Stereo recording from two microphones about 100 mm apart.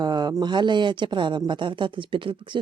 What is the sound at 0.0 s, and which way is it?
Speech, 45° right (ahead or behind).